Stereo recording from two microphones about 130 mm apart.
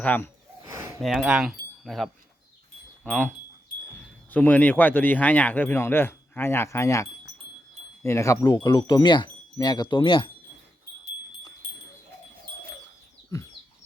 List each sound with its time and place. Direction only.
0.0 s speech: 10° left (ahead or behind)
0.7 s a sound: 20° right (ahead or behind)
1.0 s speech: 5° right (ahead or behind); by 8.5 s 25° left (ahead or behind)
8.5 s speech: 35° left (ahead or behind)